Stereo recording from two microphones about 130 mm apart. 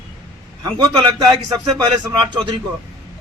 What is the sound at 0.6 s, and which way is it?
Speech, 35° right (ahead or behind).